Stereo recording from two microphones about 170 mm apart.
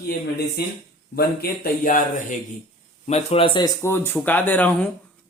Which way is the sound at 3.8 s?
15° left (ahead or behind).